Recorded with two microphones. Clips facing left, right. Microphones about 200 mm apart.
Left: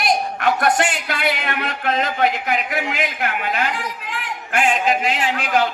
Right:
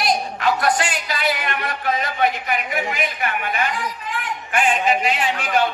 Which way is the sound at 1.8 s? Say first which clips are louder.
Left 2 dB; 85° left.